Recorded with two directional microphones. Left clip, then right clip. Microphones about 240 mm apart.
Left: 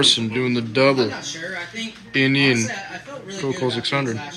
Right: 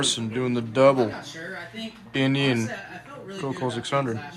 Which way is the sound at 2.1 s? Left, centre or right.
Centre.